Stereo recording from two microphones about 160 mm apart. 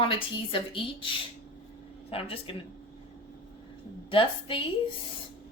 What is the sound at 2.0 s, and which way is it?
Speech, 35° left (ahead or behind).